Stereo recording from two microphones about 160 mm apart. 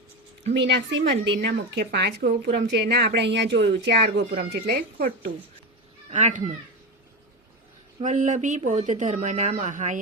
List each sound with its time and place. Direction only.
0.6 s a woman's voice: 90° right; by 5.3 s 70° right (ahead or behind)
6.1 s speech: 45° right (ahead or behind)
8.0 s speech: 50° right (ahead or behind)